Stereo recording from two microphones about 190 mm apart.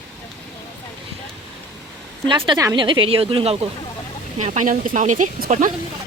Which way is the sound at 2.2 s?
25° right (ahead or behind).